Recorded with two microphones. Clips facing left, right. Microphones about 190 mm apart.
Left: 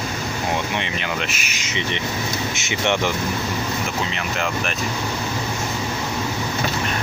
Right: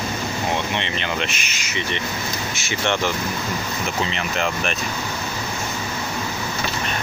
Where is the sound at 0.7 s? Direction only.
5° left (ahead or behind).